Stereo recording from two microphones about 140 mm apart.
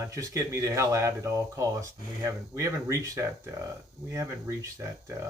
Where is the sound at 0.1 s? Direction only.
20° right (ahead or behind).